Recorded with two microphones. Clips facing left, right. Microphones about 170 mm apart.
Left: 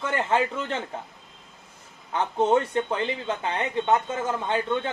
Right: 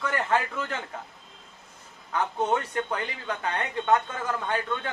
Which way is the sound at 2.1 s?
25° left (ahead or behind).